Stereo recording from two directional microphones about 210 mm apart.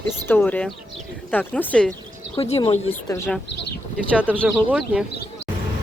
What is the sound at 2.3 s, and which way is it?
Speech, 25° left (ahead or behind).